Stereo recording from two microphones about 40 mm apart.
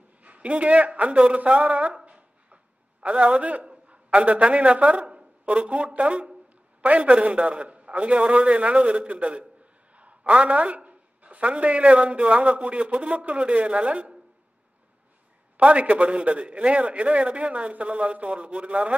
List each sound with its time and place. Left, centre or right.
0.2 s a man's voice: right
2.0 s a sound: right
3.6 s a man's voice: right
15.5 s a man's voice: right